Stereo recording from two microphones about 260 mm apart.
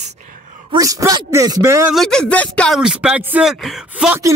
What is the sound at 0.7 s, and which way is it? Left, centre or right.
Speech, centre.